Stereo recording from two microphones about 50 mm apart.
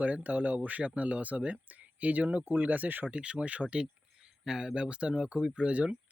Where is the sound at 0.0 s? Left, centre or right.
Right.